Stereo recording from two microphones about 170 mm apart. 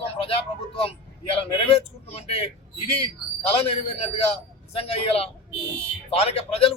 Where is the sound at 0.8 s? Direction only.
35° left (ahead or behind).